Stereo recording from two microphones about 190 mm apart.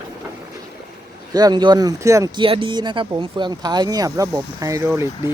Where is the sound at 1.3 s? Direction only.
20° right (ahead or behind).